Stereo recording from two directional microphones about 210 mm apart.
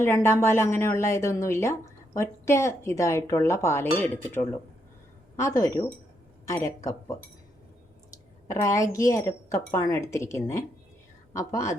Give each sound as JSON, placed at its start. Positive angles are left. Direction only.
{"t": 0.0, "sound": "a woman's voice", "side_deg": 10}
{"t": 8.4, "sound": "a woman's voice", "side_deg": 15}